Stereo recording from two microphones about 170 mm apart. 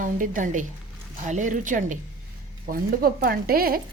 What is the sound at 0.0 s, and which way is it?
A woman's voice, 50° right (ahead or behind).